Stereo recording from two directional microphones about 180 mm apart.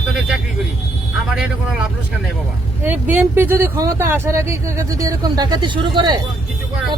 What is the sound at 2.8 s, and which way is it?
Speech, 10° right (ahead or behind).